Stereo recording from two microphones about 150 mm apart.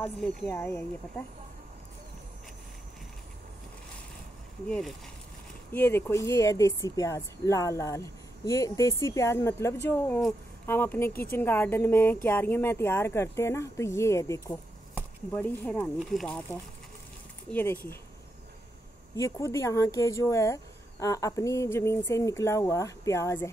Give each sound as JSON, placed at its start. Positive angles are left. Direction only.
{"t": 0.0, "sound": "a woman's voice", "side_deg": 10}
{"t": 4.6, "sound": "speech", "side_deg": 5}
{"t": 5.7, "sound": "a woman's voice", "side_deg": 15}
{"t": 15.3, "sound": "a woman's voice", "side_deg": 10}
{"t": 17.5, "sound": "a woman's voice", "side_deg": 15}
{"t": 19.1, "sound": "speech", "side_deg": 20}